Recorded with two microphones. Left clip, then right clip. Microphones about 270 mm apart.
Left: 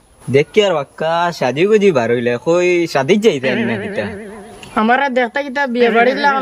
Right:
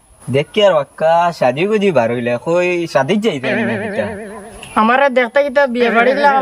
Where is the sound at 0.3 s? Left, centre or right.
Centre.